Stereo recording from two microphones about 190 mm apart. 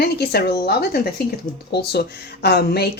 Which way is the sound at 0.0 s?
55° left (ahead or behind).